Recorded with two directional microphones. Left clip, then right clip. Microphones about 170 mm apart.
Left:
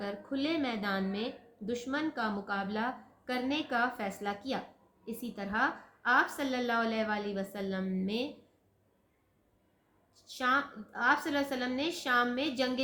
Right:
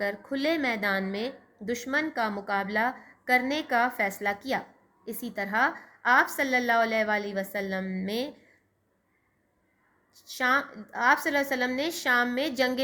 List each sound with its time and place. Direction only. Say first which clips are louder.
0.0 s speech: right 7 dB; 50° right (ahead or behind)
10.2 s speech: right 5 dB; 45° right (ahead or behind)